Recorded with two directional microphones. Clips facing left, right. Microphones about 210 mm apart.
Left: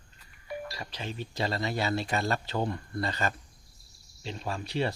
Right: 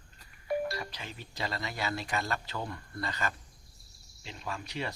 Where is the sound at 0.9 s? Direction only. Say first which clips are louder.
Left 7 dB; 30° left (ahead or behind).